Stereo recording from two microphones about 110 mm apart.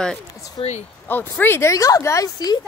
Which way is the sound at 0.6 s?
75° left (ahead or behind).